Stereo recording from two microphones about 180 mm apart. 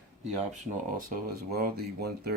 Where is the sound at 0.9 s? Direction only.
55° right (ahead or behind).